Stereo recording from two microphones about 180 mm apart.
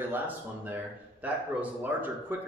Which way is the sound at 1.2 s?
10° right (ahead or behind).